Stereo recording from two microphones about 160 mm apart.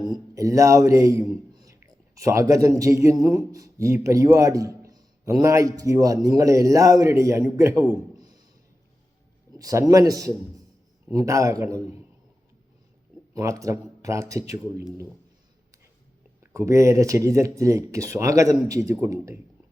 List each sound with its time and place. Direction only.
0.3 s a man's voice: 20° right (ahead or behind)
9.5 s speech: 20° right (ahead or behind)
13.3 s speech: 20° right (ahead or behind)
16.4 s speech: 20° right (ahead or behind)